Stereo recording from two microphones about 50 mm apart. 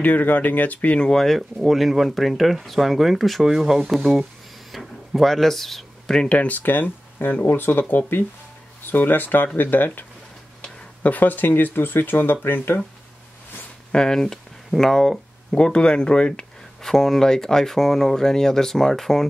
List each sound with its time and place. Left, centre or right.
0.0 s speech: left
0.9 s speech: centre
6.2 s speech: left
6.6 s speech: left
13.9 s speech: centre
16.8 s speech: centre